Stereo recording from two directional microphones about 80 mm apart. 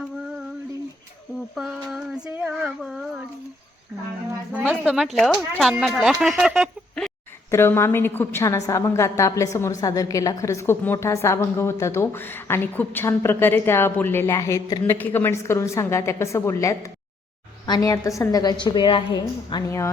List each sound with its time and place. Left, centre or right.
1.5 s a sound: centre
2.3 s female singing: right
2.8 s a sound: centre
4.5 s a sound: centre
4.9 s speech: centre
7.5 s a woman's voice: left
8.4 s a woman's voice: left
14.3 s a woman's voice: left
14.9 s a woman's voice: left
18.5 s a woman's voice: left
19.6 s a woman's voice: left